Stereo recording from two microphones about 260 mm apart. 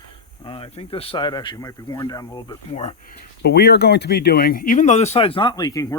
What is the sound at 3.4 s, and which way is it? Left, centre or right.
Speech, left.